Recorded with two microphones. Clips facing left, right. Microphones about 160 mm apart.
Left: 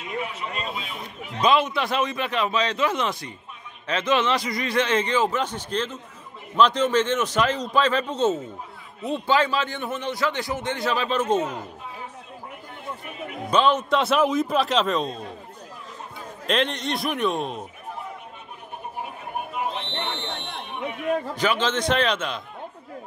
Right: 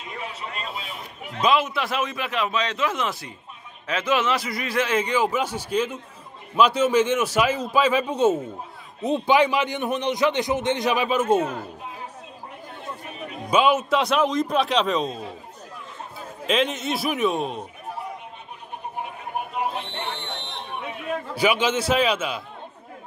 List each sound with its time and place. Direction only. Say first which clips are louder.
1.4 s a man's voice: left 1 dB; 5° right (ahead or behind)
13.5 s a man's voice: right 1 dB; 10° right (ahead or behind)
16.4 s a man's voice: right 1 dB; centre (ahead or behind)
19.9 s a sound: left 1 dB; 10° right (ahead or behind)
21.4 s a man's voice: right 2 dB; 10° right (ahead or behind)